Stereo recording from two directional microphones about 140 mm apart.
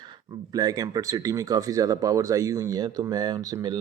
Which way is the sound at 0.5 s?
25° right (ahead or behind).